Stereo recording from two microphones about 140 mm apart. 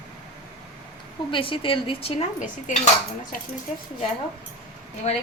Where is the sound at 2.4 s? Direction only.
65° left (ahead or behind).